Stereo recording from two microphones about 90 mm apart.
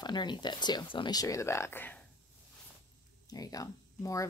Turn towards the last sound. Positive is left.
turn(degrees=40)  # may be behind; listen again after turning